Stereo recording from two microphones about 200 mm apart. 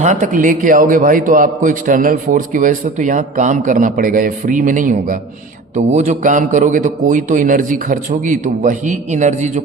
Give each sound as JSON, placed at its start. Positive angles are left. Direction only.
{"t": 0.0, "sound": "a man's voice", "side_deg": -40}